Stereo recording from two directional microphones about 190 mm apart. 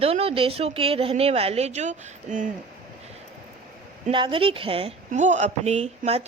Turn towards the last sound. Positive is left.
turn(degrees=-35)  # may be behind; listen again after turning